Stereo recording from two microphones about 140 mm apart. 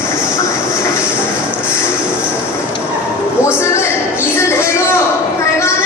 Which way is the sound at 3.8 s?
15° left (ahead or behind).